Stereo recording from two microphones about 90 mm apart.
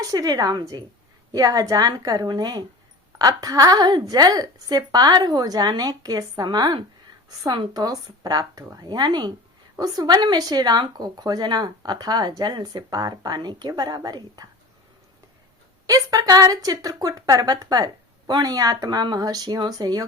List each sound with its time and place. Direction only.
0.0 s a woman's voice: 45° right (ahead or behind)
9.7 s a woman's voice: 45° right (ahead or behind)
15.9 s a woman's voice: 40° right (ahead or behind)